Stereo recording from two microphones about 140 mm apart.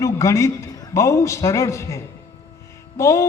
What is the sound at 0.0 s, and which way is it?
A man's voice, 20° left (ahead or behind).